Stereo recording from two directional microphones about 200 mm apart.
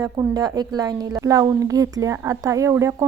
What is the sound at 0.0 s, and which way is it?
A woman's voice, 15° right (ahead or behind).